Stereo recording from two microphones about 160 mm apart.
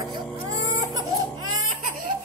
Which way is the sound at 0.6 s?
25° right (ahead or behind).